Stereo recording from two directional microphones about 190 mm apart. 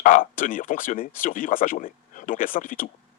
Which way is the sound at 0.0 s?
45° left (ahead or behind).